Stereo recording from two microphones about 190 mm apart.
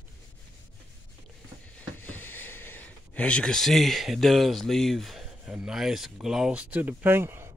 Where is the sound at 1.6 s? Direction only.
10° left (ahead or behind); by 7.5 s 15° right (ahead or behind).